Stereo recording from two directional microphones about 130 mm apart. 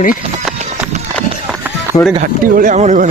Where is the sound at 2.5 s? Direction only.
85° right; by 3.1 s 65° right (ahead or behind).